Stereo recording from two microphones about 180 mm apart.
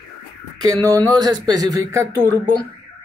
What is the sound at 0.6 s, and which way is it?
Speech, 20° right (ahead or behind).